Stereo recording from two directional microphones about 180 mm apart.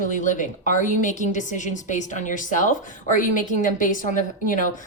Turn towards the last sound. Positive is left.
turn(degrees=45)  # may be behind; listen again after turning